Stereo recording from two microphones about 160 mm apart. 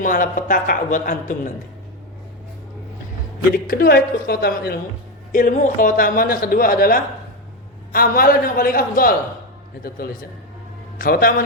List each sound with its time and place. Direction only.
0.0 s a man's voice: 55° left (ahead or behind)
3.5 s a woman's voice: 65° left (ahead or behind)
5.3 s a man's voice: 55° left (ahead or behind)
10.9 s a man's voice: 65° left (ahead or behind)